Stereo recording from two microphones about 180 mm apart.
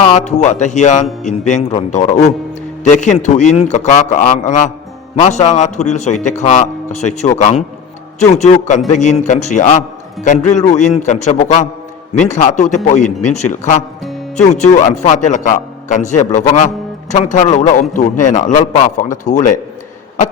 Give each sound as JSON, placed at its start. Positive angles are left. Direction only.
{"t": 0.0, "sound": "a man's voice", "side_deg": 40}